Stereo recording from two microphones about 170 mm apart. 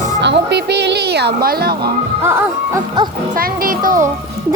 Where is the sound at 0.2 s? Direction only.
90° right; by 1.7 s 65° right (ahead or behind).